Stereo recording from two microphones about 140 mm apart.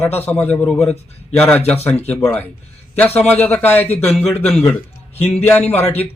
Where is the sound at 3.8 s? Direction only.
45° left (ahead or behind).